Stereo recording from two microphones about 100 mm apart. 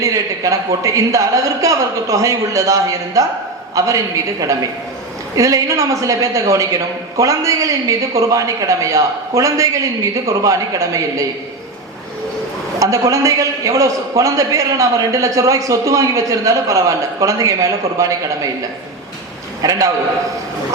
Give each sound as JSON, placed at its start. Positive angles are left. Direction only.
{"t": 0.0, "sound": "a man's voice", "side_deg": -35}
{"t": 12.8, "sound": "a man's voice", "side_deg": -35}
{"t": 19.6, "sound": "a man's voice", "side_deg": -35}